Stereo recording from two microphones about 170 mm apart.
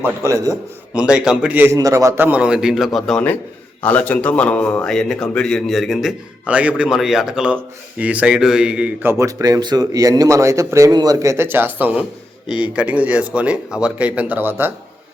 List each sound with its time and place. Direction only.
0.0 s a man's voice: 15° right (ahead or behind)
0.9 s a man's voice: 5° right (ahead or behind)